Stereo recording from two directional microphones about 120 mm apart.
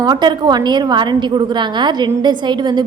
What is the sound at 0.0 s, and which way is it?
A woman's voice, 35° right (ahead or behind).